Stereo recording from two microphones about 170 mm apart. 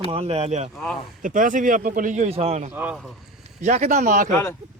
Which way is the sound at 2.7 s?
10° right (ahead or behind).